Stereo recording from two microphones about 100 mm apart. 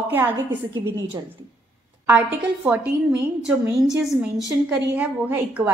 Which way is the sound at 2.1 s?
15° right (ahead or behind).